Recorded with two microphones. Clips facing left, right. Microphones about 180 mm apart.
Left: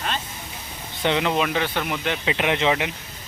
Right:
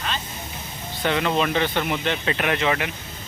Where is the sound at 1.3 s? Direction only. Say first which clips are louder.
Right 1 dB; 10° left (ahead or behind).